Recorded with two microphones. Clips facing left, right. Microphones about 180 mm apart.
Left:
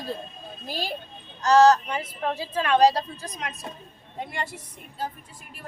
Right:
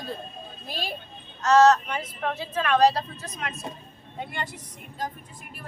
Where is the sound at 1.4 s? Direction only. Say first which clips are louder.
Left 1 dB; 30° left (ahead or behind).